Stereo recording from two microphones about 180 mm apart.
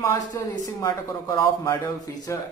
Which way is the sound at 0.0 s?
15° left (ahead or behind).